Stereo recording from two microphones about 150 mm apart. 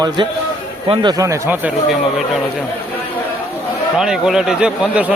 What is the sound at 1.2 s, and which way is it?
Speech, 15° right (ahead or behind).